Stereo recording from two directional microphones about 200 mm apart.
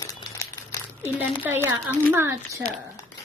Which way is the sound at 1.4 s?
10° right (ahead or behind).